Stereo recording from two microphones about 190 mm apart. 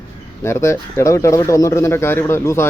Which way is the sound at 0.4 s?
15° left (ahead or behind).